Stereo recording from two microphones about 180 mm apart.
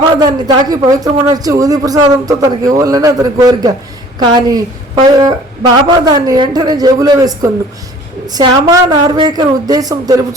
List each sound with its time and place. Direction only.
0.2 s speech: 20° right (ahead or behind)